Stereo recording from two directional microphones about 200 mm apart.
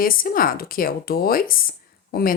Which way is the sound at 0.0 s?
45° left (ahead or behind).